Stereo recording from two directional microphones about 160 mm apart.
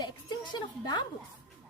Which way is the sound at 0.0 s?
25° left (ahead or behind).